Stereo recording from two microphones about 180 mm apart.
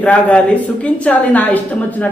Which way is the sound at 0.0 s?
5° left (ahead or behind).